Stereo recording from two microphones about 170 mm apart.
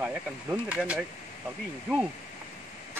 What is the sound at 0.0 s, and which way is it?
Speech, 5° right (ahead or behind).